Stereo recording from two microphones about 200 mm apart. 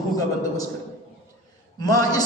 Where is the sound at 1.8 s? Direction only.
20° left (ahead or behind).